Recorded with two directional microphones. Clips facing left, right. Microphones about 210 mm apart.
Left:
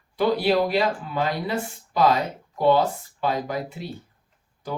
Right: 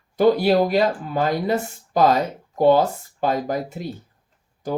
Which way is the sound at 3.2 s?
45° right (ahead or behind).